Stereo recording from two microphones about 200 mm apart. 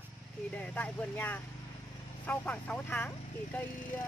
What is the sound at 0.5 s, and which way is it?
Speech, 5° left (ahead or behind).